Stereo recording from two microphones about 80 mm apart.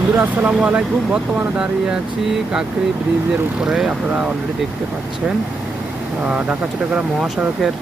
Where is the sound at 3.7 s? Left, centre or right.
Centre.